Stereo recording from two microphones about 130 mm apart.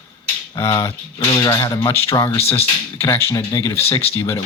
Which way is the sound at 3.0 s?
20° left (ahead or behind).